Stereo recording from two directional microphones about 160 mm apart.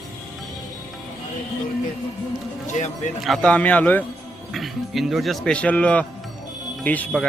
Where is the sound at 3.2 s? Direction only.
Centre (ahead or behind).